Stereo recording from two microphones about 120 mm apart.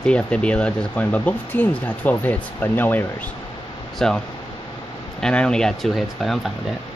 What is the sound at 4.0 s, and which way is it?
Speech, 5° left (ahead or behind).